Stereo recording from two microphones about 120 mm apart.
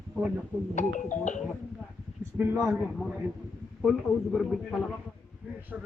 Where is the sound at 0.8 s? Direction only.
90° left.